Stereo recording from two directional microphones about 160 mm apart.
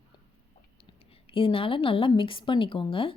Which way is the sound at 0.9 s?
35° left (ahead or behind).